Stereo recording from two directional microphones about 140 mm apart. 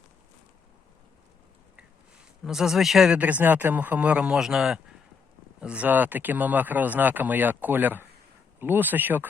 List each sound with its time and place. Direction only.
2.4 s speech: 5° right (ahead or behind)